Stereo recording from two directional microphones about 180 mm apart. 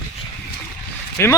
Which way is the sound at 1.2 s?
15° left (ahead or behind).